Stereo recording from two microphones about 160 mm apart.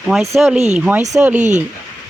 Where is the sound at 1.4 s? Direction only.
45° right (ahead or behind).